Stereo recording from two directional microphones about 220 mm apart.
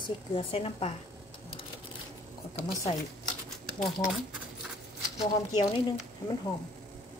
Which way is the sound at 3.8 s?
Centre (ahead or behind).